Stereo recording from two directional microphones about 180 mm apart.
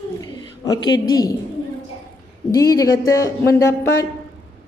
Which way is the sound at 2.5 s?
20° left (ahead or behind).